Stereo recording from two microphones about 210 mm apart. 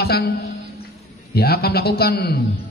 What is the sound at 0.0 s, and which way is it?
A man's voice, 50° left (ahead or behind).